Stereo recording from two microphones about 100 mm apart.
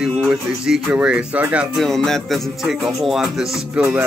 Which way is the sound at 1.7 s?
5° left (ahead or behind).